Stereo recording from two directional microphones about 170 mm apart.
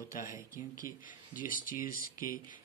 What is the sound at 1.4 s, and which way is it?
Speech, 55° left (ahead or behind).